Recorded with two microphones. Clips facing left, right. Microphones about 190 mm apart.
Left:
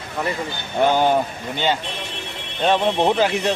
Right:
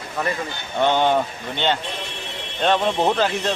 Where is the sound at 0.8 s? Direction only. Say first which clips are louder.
Left 1 dB; 10° left (ahead or behind).